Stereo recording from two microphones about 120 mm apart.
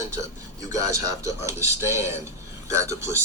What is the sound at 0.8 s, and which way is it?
Speech, 25° right (ahead or behind).